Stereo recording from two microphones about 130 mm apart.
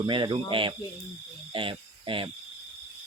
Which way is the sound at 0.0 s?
35° right (ahead or behind).